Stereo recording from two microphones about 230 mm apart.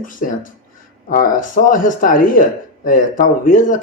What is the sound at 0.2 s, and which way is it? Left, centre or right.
Speech, left.